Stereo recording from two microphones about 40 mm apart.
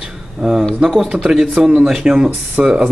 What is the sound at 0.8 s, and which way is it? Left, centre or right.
Speech, centre.